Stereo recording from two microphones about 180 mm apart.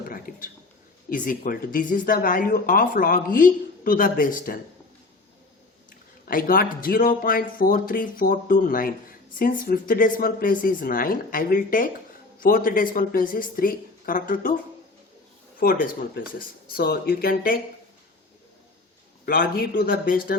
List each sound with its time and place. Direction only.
0.1 s a sound: 50° left (ahead or behind)
1.1 s speech: 50° left (ahead or behind)
6.2 s speech: 55° left (ahead or behind)
16.7 s speech: 55° left (ahead or behind)
19.2 s speech: 55° left (ahead or behind)